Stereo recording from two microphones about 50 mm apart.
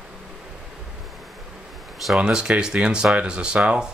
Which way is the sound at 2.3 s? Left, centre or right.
Centre.